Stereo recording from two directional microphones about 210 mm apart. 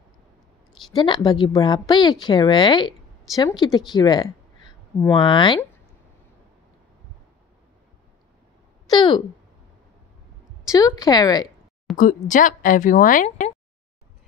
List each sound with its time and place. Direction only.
0.9 s a woman's voice: 20° left (ahead or behind)
10.7 s speech: 15° left (ahead or behind)
12.0 s a woman's voice: 40° left (ahead or behind)